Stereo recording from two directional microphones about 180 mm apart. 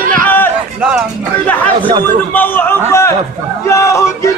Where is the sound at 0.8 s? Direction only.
5° right (ahead or behind).